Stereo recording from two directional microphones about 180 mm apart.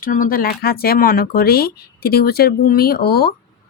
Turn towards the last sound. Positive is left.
turn(degrees=60)  # may be behind; listen again after turning